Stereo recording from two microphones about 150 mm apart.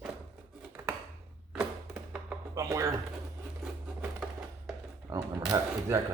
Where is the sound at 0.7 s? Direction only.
15° right (ahead or behind).